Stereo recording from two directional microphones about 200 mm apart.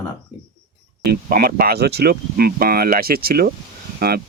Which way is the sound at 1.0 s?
50° right (ahead or behind).